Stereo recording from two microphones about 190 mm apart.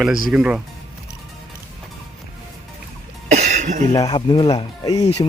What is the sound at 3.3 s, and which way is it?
Cough, 35° right (ahead or behind).